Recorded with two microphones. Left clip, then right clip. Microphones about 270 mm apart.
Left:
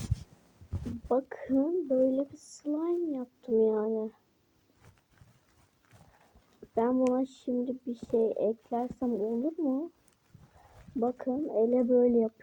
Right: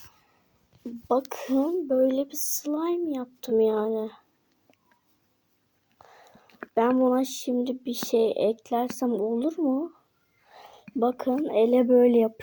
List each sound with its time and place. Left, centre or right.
1.0 s speech: right
6.7 s speech: right
11.0 s speech: right